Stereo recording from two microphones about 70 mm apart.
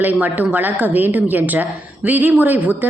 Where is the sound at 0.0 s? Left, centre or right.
Right.